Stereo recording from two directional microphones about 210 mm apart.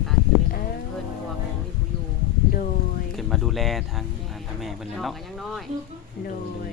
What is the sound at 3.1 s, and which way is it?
Speech, centre (ahead or behind).